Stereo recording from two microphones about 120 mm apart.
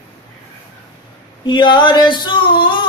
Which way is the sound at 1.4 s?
40° left (ahead or behind).